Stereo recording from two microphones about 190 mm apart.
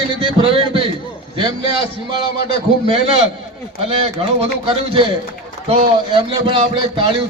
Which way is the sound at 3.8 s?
30° right (ahead or behind).